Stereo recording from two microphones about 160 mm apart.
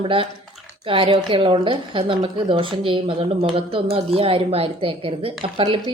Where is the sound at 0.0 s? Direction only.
35° right (ahead or behind).